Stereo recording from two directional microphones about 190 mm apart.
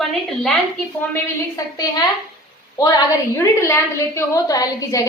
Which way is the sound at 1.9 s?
20° left (ahead or behind).